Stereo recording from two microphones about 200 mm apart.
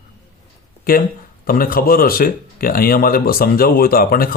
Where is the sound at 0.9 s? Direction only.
45° left (ahead or behind).